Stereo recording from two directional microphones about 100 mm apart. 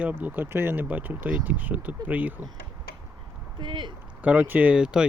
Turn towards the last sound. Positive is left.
turn(degrees=-10)  # may be behind; listen again after turning